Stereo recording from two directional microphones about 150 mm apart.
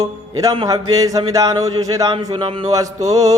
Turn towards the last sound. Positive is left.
turn(degrees=-25)  # may be behind; listen again after turning